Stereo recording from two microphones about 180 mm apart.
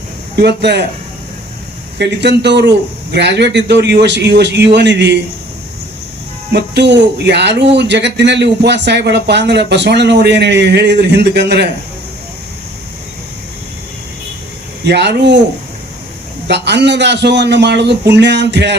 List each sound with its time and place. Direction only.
0.3 s speech: 65° right (ahead or behind)
2.0 s speech: 70° right (ahead or behind)
6.5 s speech: 70° right (ahead or behind)
14.8 s speech: 70° right (ahead or behind)
16.5 s speech: 70° right (ahead or behind)